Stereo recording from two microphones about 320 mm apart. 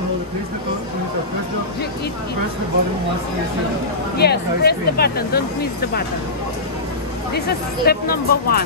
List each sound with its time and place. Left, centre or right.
4.2 s speech: left
7.3 s speech: left